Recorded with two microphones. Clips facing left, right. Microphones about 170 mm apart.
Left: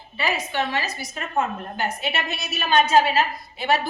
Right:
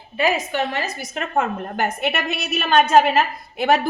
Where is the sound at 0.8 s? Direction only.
60° right (ahead or behind).